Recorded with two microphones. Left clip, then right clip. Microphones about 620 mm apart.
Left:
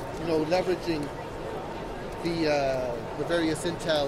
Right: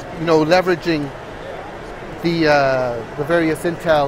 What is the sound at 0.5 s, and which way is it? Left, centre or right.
Speech, right.